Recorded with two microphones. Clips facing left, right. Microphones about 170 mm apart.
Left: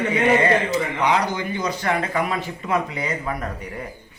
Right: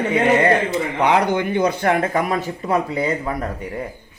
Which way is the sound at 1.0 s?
55° right (ahead or behind).